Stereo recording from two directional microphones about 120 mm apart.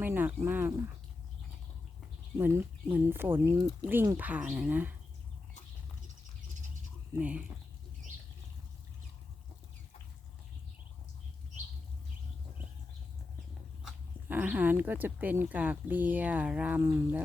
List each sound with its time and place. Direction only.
0.0 s a sound: 15° right (ahead or behind)
2.4 s speech: 15° right (ahead or behind)
7.2 s speech: 10° right (ahead or behind)
14.3 s speech: 15° right (ahead or behind)